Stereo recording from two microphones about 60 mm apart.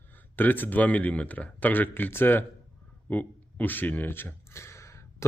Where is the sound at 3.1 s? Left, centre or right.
Left.